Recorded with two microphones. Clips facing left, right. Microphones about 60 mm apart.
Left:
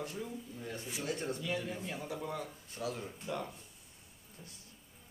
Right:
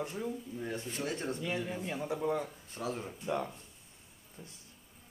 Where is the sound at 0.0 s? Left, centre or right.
Right.